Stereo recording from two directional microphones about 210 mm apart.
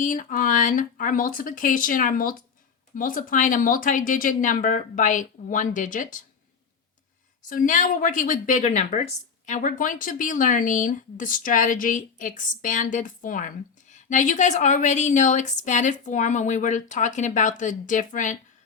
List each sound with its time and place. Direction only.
0.0 s a woman's voice: 40° left (ahead or behind)
7.4 s a woman's voice: 40° left (ahead or behind)